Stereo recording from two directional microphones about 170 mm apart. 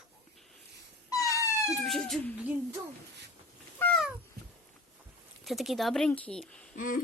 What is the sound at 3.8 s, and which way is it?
Cat, 5° left (ahead or behind).